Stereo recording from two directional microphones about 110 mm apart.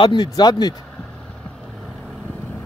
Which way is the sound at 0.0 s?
40° left (ahead or behind).